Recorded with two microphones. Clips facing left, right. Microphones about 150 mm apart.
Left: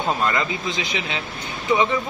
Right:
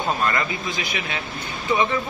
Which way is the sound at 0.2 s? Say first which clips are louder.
Left 1 dB; 15° left (ahead or behind).